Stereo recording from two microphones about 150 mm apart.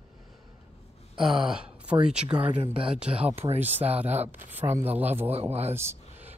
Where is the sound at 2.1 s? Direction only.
5° right (ahead or behind).